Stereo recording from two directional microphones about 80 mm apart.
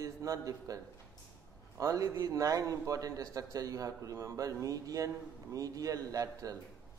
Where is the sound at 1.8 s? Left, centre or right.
Right.